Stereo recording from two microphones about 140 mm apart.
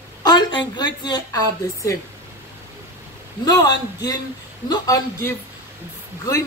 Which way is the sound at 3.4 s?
30° left (ahead or behind).